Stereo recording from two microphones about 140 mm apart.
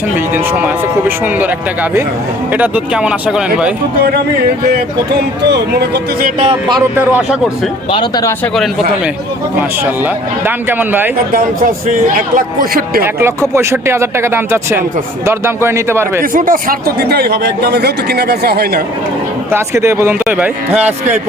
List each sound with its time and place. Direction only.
0.3 s speech: 10° right (ahead or behind)
6.9 s speech: 10° right (ahead or behind)
7.9 s speech: 40° left (ahead or behind)
9.6 s speech: 15° right (ahead or behind)
11.3 s a man's voice: 85° right
13.1 s speech: 20° right (ahead or behind)
16.2 s speech: 85° right
18.4 s speech: 90° right
19.5 s speech: 20° right (ahead or behind)